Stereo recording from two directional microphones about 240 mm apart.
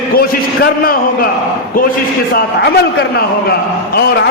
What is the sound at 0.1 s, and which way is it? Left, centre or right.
A man's voice, left.